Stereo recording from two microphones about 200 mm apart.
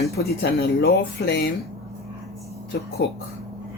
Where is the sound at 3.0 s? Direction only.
60° left (ahead or behind).